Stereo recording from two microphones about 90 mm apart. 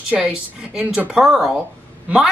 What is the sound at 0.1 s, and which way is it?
Speech, 10° right (ahead or behind).